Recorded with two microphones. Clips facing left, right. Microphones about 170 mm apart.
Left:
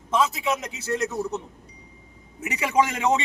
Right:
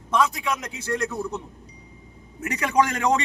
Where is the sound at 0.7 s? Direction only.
25° left (ahead or behind).